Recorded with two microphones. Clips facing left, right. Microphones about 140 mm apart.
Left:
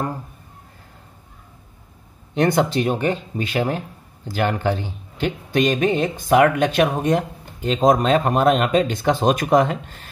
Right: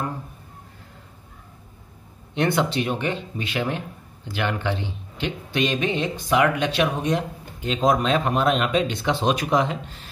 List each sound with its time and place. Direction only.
2.3 s speech: 40° left (ahead or behind)